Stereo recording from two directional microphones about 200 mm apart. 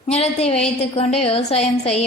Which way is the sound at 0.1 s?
30° left (ahead or behind).